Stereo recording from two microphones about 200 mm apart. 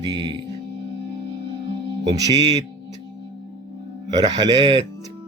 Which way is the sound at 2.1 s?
20° right (ahead or behind).